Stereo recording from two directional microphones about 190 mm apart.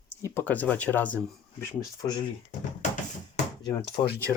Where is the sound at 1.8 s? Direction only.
20° left (ahead or behind).